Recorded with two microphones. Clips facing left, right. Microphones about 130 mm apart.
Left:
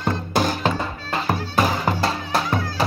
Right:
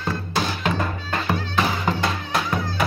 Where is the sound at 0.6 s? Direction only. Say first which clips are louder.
Left 1 dB; 30° left (ahead or behind).